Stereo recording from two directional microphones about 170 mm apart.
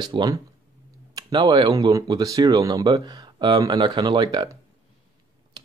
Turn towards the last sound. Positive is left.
turn(degrees=-25)  # may be behind; listen again after turning